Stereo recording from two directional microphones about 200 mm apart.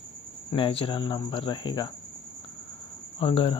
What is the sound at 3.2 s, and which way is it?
Speech, 25° left (ahead or behind).